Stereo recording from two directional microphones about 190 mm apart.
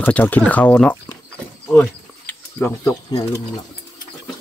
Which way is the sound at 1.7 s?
10° left (ahead or behind).